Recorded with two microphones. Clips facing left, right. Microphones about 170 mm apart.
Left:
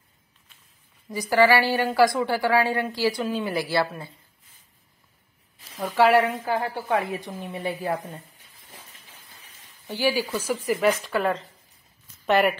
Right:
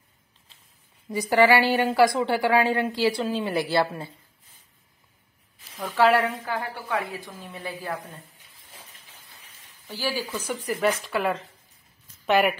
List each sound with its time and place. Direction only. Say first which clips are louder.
1.1 s a woman's voice: even; 20° right (ahead or behind)
5.8 s speech: left 2 dB; 15° left (ahead or behind)
6.5 s a woman's voice: left 4 dB; 25° left (ahead or behind)
9.8 s speech: left 5 dB; 15° left (ahead or behind)
10.4 s speech: left 2 dB; centre (ahead or behind)